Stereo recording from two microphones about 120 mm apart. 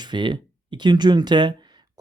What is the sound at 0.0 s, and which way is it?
Speech, 40° right (ahead or behind).